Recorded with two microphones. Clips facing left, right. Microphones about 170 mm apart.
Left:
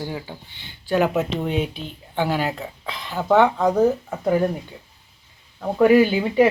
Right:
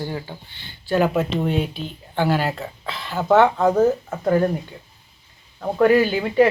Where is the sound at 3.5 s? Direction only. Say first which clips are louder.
Right 2 dB; 5° right (ahead or behind).